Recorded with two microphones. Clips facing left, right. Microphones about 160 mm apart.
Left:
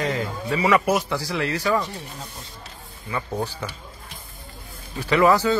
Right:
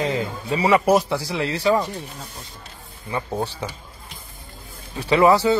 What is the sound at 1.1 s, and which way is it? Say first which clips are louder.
Speech: right 1 dB; 20° right (ahead or behind).